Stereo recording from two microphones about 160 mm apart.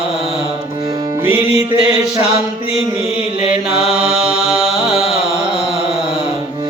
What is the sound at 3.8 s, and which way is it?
Mantra, 5° right (ahead or behind).